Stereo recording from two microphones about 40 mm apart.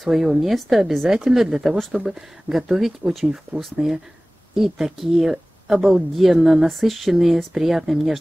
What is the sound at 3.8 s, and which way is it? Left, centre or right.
Speech, right.